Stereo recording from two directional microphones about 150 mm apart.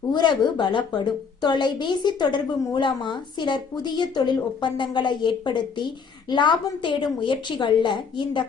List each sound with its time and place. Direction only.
0.1 s a woman's voice: 30° left (ahead or behind)